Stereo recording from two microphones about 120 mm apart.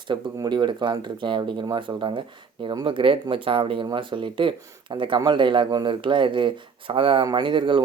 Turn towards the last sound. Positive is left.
turn(degrees=-45)  # may be behind; listen again after turning